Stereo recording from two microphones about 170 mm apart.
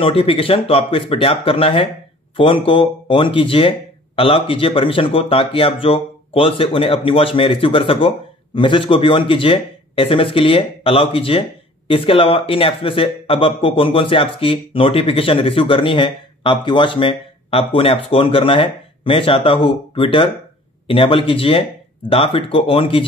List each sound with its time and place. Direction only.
0.0 s speech: 35° left (ahead or behind)